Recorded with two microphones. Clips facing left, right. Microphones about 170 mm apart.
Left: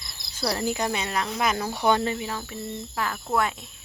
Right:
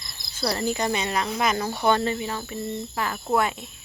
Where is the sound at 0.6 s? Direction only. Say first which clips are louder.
Right 2 dB; 5° left (ahead or behind).